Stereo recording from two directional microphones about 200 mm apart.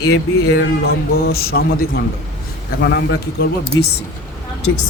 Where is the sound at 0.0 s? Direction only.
55° left (ahead or behind).